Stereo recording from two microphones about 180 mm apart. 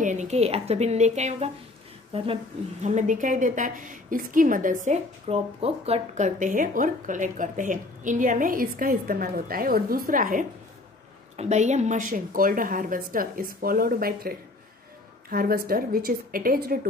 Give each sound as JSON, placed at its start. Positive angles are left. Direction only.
{"t": 0.0, "sound": "a woman's voice", "side_deg": -40}
{"t": 11.3, "sound": "a woman's voice", "side_deg": -40}